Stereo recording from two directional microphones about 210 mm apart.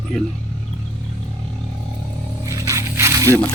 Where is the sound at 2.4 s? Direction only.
15° right (ahead or behind).